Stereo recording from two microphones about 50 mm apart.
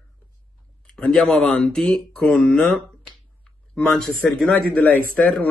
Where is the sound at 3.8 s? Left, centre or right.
Centre.